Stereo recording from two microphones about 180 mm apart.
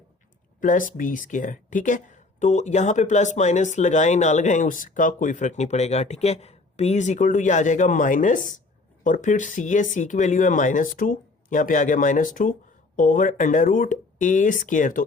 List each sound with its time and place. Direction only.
0.6 s speech: 45° left (ahead or behind)